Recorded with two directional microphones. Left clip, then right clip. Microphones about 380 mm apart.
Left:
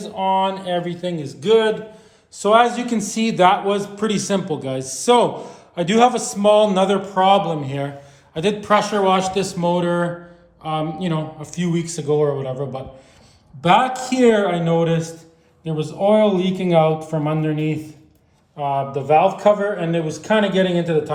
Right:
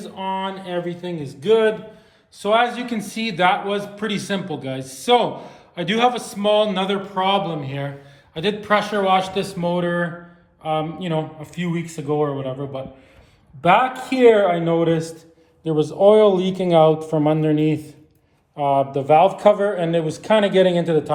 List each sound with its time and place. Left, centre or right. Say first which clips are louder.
0.0 s a man's voice: left 7 dB; centre